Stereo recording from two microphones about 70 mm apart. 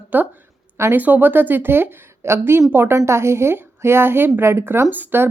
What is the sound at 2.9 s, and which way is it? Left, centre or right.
Speech, right.